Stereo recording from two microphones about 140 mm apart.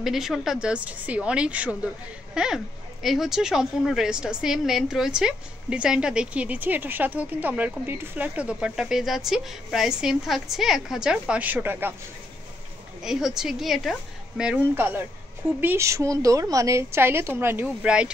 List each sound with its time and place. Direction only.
0.0 s a woman's voice: centre (ahead or behind)
13.0 s a woman's voice: 5° right (ahead or behind)